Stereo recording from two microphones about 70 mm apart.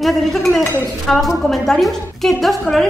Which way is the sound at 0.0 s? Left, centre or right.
Centre.